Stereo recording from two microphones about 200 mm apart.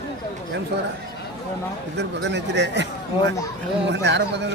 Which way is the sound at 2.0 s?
60° right (ahead or behind).